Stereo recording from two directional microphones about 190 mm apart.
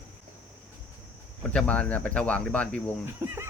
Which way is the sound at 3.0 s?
10° right (ahead or behind).